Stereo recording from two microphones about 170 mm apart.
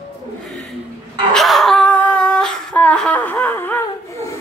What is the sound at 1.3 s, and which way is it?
Humming, centre (ahead or behind).